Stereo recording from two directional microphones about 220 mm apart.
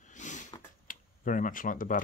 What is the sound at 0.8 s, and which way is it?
Speech, 40° left (ahead or behind).